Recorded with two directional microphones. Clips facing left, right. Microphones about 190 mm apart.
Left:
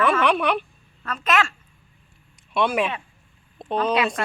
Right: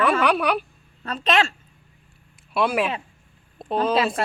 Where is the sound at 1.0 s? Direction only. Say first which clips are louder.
Right 1 dB; 30° right (ahead or behind).